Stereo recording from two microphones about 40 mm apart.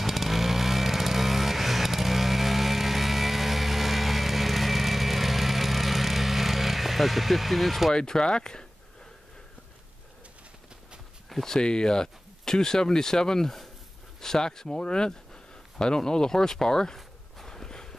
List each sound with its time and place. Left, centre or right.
0.0 s vehicle: centre
7.9 s speech: centre
11.2 s speech: centre